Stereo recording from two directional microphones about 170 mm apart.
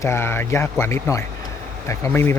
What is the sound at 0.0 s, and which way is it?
Speech, 15° left (ahead or behind).